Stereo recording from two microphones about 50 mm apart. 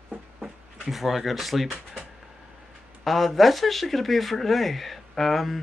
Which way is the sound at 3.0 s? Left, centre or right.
Centre.